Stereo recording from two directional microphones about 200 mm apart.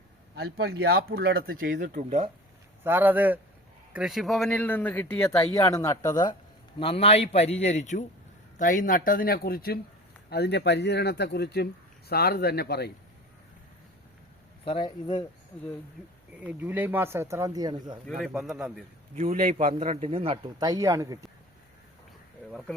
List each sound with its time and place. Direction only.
0.3 s speech: 50° right (ahead or behind); by 2.3 s 30° right (ahead or behind)
2.8 s speech: 10° right (ahead or behind); by 6.3 s 15° left (ahead or behind)
6.7 s a man's voice: 30° left (ahead or behind); by 12.9 s 55° left (ahead or behind)
14.6 s speech: 25° left (ahead or behind)
16.5 s speech: 10° right (ahead or behind)
18.2 s speech: centre (ahead or behind)
19.1 s speech: 40° right (ahead or behind); by 21.2 s 15° right (ahead or behind)